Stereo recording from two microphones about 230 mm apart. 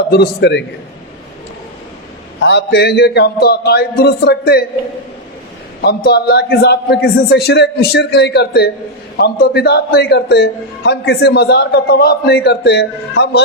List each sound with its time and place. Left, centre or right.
0.1 s a man's voice: left
2.4 s a man's voice: left
5.8 s a man's voice: left